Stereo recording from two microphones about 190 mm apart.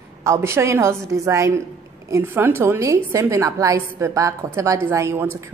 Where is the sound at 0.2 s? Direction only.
15° right (ahead or behind).